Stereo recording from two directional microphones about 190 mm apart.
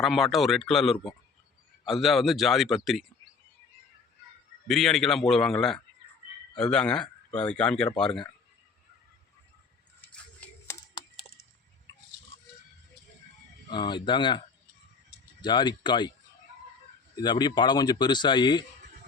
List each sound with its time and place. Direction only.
0.0 s speech: centre (ahead or behind)
4.7 s speech: centre (ahead or behind)
10.0 s a sound: 5° left (ahead or behind)
13.7 s speech: 25° left (ahead or behind)
17.2 s speech: 20° left (ahead or behind)